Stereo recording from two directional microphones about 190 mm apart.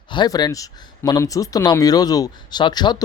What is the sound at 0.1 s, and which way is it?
Speech, 20° left (ahead or behind).